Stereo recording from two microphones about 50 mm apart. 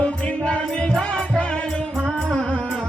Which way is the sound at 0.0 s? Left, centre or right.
Left.